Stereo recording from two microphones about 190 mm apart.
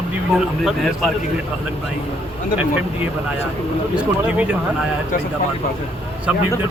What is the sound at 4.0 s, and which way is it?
Speech, 5° right (ahead or behind).